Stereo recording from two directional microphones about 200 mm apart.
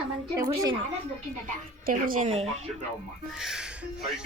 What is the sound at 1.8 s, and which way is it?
Speech, 45° right (ahead or behind).